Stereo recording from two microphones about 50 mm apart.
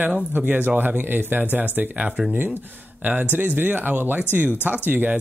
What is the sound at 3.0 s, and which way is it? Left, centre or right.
Speech, right.